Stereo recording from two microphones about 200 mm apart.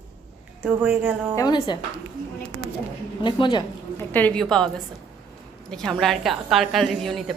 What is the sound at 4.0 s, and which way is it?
A woman's voice, 10° left (ahead or behind).